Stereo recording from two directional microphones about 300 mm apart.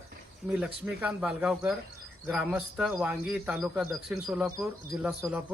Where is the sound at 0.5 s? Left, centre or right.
Centre.